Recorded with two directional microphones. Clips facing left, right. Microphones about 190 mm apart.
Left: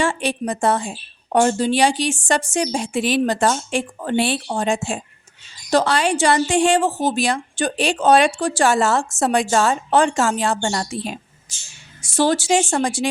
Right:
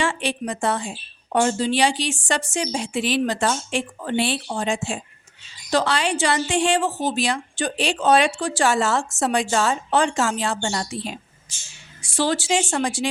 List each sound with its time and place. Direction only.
0.0 s speech: 45° left (ahead or behind)